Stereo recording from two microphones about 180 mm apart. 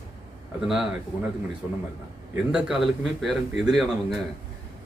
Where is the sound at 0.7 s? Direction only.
Centre (ahead or behind).